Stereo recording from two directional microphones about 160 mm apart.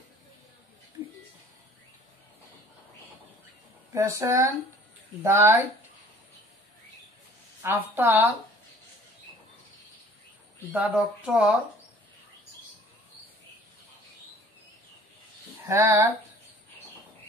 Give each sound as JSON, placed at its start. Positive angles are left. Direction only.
{"t": 3.9, "sound": "speech", "side_deg": -20}
{"t": 7.6, "sound": "speech", "side_deg": -15}
{"t": 10.7, "sound": "speech", "side_deg": -10}
{"t": 15.6, "sound": "speech", "side_deg": -15}